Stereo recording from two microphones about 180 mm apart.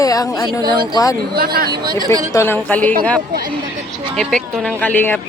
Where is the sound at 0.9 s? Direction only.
20° left (ahead or behind).